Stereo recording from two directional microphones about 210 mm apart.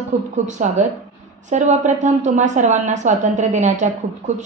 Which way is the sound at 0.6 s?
35° right (ahead or behind).